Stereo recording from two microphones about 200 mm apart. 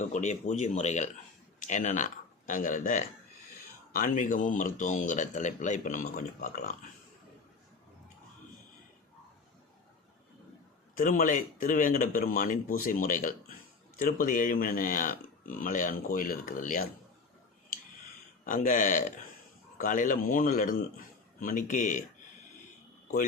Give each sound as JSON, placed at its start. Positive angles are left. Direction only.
{"t": 0.0, "sound": "speech", "side_deg": 35}
{"t": 10.9, "sound": "speech", "side_deg": 40}
{"t": 18.4, "sound": "speech", "side_deg": 40}